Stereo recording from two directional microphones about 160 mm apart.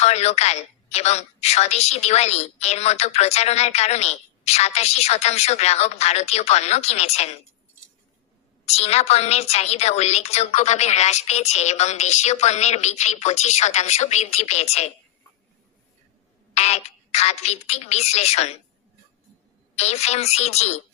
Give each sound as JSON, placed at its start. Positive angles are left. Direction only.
{"t": 0.0, "sound": "a woman's voice", "side_deg": 40}
{"t": 8.6, "sound": "a woman's voice", "side_deg": 40}
{"t": 16.6, "sound": "a woman's voice", "side_deg": 45}
{"t": 19.7, "sound": "a woman's voice", "side_deg": 45}